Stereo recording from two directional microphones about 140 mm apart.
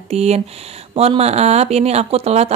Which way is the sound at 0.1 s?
50° right (ahead or behind).